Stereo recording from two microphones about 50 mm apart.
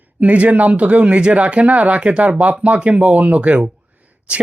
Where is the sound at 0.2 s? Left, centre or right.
Right.